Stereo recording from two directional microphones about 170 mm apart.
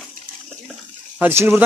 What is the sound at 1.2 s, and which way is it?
Speech, 15° right (ahead or behind).